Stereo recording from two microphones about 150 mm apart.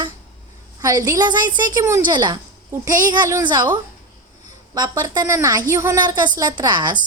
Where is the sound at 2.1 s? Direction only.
30° right (ahead or behind).